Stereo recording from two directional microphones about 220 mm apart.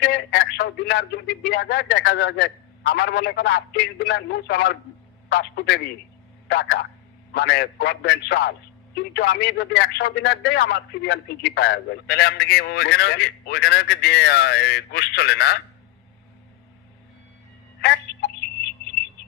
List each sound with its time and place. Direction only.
0.0 s speech: 50° left (ahead or behind)
17.7 s telephone: 50° left (ahead or behind)